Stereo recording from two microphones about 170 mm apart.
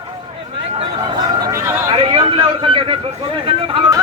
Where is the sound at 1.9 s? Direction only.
30° right (ahead or behind).